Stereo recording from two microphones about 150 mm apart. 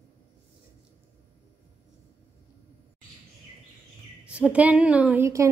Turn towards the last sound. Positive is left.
turn(degrees=-10)  # may be behind; listen again after turning